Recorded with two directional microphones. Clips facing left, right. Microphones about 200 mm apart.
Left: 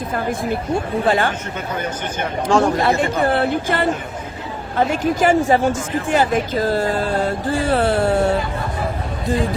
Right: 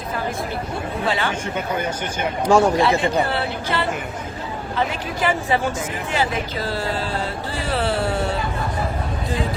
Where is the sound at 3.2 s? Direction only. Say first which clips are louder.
Left 7 dB; 50° left (ahead or behind).